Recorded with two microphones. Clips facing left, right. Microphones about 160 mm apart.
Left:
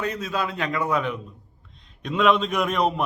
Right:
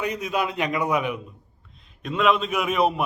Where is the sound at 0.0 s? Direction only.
15° right (ahead or behind).